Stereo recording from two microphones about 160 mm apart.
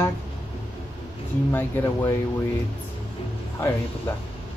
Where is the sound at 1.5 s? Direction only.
15° left (ahead or behind).